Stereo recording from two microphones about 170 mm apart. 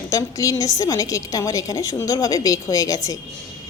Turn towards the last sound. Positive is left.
turn(degrees=20)  # may be behind; listen again after turning